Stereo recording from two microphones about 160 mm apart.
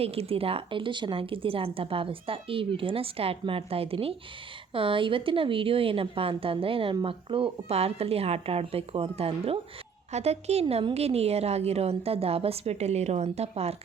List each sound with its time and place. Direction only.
0.0 s a woman's voice: 40° right (ahead or behind)